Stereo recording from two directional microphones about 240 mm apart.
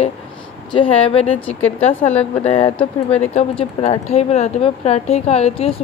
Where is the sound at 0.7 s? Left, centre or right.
Left.